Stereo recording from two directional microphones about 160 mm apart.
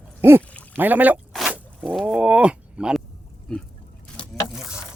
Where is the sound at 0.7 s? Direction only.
10° right (ahead or behind).